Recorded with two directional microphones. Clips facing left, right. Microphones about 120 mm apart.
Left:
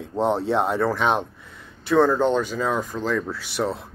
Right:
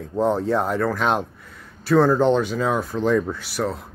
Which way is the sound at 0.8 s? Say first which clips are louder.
Even; 5° right (ahead or behind).